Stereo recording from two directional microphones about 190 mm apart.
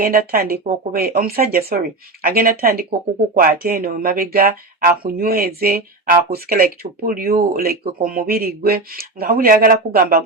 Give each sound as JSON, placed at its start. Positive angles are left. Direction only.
{"t": 0.0, "sound": "speech", "side_deg": -50}